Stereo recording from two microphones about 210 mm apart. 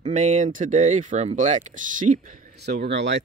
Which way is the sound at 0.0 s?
35° right (ahead or behind).